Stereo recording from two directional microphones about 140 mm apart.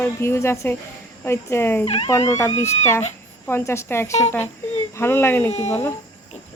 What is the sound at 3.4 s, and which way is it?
Speech, 20° left (ahead or behind).